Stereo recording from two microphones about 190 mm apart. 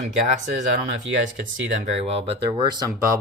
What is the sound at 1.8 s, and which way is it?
Speech, 35° right (ahead or behind).